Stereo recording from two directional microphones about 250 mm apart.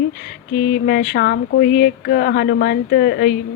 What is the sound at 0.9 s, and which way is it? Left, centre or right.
Speech, left.